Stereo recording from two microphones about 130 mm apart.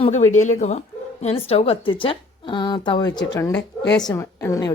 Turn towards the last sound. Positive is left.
turn(degrees=25)  # may be behind; listen again after turning